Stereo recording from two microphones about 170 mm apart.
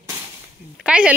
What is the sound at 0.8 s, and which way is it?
Speech, 5° right (ahead or behind).